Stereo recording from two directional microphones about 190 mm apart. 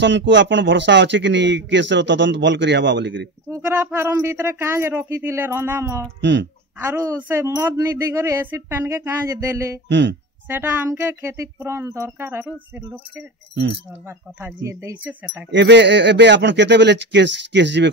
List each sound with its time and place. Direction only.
0.0 s speech: 70° right (ahead or behind)
3.4 s speech: 15° right (ahead or behind)
9.8 s speech: 70° right (ahead or behind)
10.5 s speech: 10° right (ahead or behind)
14.0 s speech: 15° right (ahead or behind)
15.5 s speech: 65° right (ahead or behind)